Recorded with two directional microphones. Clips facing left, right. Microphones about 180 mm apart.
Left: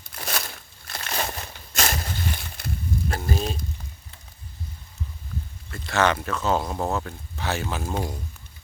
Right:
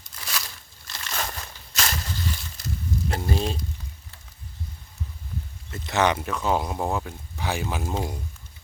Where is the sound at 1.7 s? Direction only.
50° left (ahead or behind).